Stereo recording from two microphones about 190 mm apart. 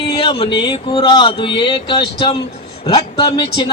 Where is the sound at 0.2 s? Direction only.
30° left (ahead or behind).